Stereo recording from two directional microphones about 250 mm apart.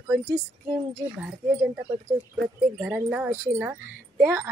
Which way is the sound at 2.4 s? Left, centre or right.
Centre.